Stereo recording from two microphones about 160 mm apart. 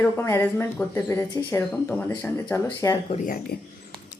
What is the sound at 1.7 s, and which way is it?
Speech, 5° left (ahead or behind).